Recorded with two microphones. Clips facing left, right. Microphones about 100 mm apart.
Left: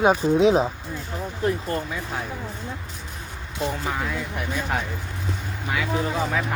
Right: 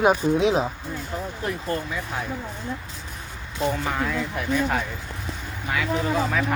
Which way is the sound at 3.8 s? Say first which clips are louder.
Right 1 dB; 5° left (ahead or behind).